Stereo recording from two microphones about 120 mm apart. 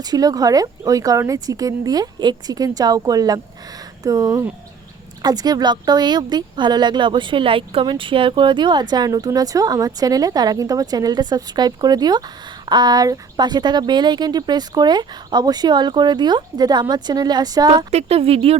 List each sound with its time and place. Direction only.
0.0 s speech: 30° right (ahead or behind)
17.9 s a woman's voice: 55° right (ahead or behind)